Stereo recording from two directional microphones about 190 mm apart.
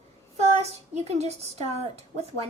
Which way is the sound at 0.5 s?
35° right (ahead or behind).